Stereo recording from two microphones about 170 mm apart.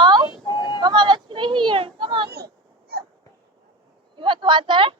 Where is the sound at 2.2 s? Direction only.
70° right (ahead or behind).